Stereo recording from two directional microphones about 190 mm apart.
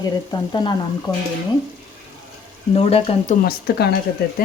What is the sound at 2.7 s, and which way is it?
Speech, 30° left (ahead or behind).